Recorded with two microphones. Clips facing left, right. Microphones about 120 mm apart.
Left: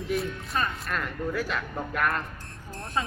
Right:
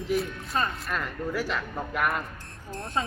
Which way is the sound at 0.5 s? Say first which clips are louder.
Right 1 dB; 30° right (ahead or behind).